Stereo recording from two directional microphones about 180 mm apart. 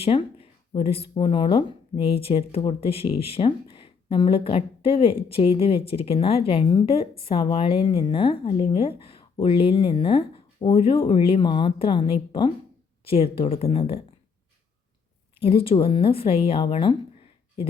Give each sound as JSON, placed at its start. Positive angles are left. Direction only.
{"t": 0.0, "sound": "speech", "side_deg": 30}
{"t": 15.4, "sound": "speech", "side_deg": 30}